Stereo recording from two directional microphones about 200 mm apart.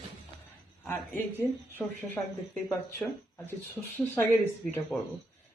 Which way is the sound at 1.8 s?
5° left (ahead or behind).